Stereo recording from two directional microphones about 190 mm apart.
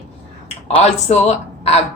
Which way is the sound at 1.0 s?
35° left (ahead or behind).